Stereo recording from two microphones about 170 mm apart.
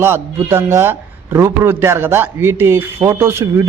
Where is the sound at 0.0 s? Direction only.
15° right (ahead or behind).